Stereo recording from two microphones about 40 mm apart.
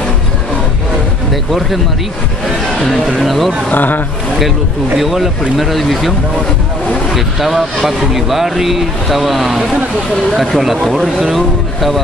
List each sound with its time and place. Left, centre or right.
1.3 s speech: centre
2.8 s speech: centre
3.2 s speech: centre
3.7 s speech: left
4.9 s speech: centre
7.2 s speech: centre